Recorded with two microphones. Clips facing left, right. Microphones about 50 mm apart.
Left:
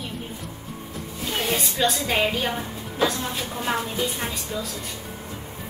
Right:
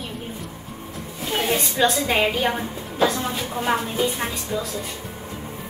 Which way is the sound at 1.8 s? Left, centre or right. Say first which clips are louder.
Right 3 dB; centre.